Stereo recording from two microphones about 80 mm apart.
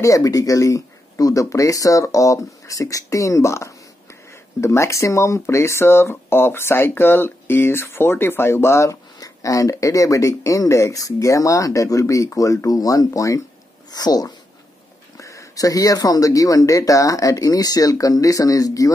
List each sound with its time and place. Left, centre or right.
0.0 s speech: left
13.9 s speech: left
15.1 s speech: left